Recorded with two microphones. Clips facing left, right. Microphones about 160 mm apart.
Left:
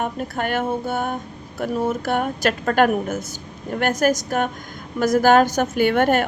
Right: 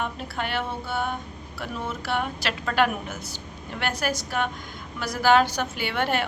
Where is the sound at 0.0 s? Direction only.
50° left (ahead or behind).